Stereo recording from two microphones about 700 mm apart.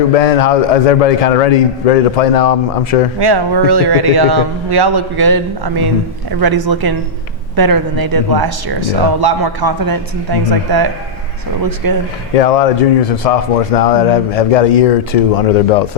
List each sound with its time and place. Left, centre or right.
0.1 s a man's voice: left
3.2 s speech: right
12.4 s a man's voice: left